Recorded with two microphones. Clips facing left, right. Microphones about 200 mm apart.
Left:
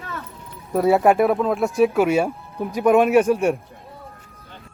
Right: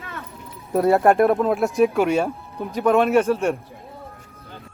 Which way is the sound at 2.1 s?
10° left (ahead or behind).